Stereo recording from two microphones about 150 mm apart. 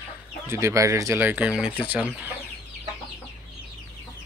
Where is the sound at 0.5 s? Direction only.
20° right (ahead or behind).